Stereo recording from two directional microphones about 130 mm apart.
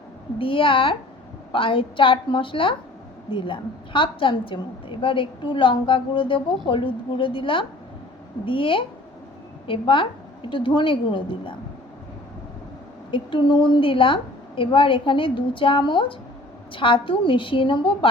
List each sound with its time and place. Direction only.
0.3 s a woman's voice: 40° left (ahead or behind)
13.1 s a woman's voice: 40° left (ahead or behind)